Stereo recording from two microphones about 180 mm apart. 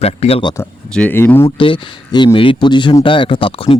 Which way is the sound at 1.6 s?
25° left (ahead or behind).